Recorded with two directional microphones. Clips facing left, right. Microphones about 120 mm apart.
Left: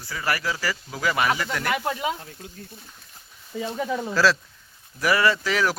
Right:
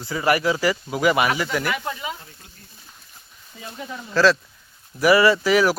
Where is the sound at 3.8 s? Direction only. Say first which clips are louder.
Left 7 dB; 85° left.